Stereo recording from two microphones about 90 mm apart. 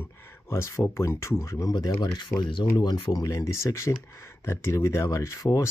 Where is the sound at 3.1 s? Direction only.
35° left (ahead or behind).